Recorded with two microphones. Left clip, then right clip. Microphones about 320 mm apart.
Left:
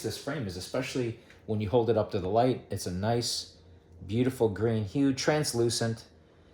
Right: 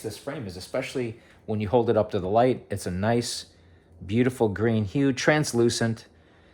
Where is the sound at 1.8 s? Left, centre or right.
Right.